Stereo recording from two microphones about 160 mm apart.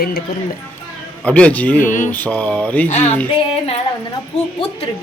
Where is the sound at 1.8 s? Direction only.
50° left (ahead or behind).